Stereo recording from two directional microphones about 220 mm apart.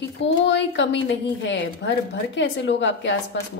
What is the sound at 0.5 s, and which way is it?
A woman's voice, 55° left (ahead or behind).